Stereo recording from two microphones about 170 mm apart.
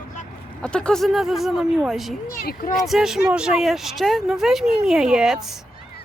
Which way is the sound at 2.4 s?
60° left (ahead or behind).